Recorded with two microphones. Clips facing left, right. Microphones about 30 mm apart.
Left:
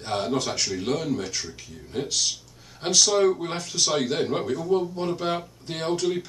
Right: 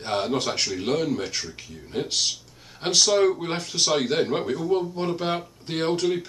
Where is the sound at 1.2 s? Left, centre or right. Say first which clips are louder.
Right 1 dB; right.